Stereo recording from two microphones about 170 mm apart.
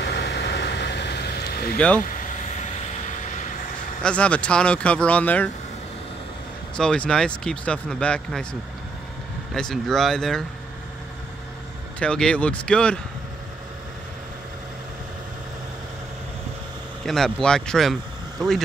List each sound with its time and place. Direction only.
0.0 s vehicle: 80° left
4.0 s speech: 5° left (ahead or behind)
6.8 s speech: 5° left (ahead or behind)
9.5 s speech: centre (ahead or behind)
12.0 s speech: 5° left (ahead or behind)
17.0 s speech: centre (ahead or behind)